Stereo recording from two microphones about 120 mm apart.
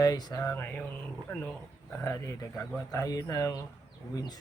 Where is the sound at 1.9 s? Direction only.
20° left (ahead or behind).